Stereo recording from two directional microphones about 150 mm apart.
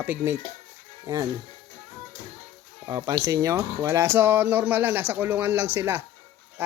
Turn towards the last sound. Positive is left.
turn(degrees=-15)  # may be behind; listen again after turning